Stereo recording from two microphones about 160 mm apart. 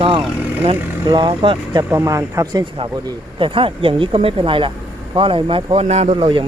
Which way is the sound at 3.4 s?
35° right (ahead or behind).